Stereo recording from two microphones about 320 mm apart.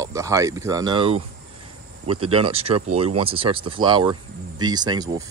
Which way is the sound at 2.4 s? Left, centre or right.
Centre.